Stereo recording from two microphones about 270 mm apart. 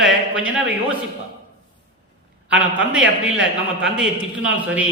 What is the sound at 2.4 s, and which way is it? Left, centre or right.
A man's voice, centre.